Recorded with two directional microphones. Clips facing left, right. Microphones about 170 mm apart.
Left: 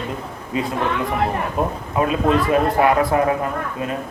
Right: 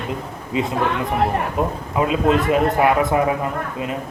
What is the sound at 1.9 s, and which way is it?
A man's voice, 20° right (ahead or behind).